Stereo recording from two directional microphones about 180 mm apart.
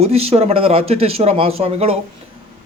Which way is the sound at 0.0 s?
35° right (ahead or behind).